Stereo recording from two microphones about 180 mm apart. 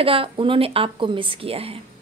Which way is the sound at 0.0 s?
30° right (ahead or behind).